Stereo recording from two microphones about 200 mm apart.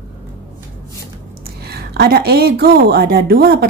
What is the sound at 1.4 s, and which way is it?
A woman's voice, 50° right (ahead or behind).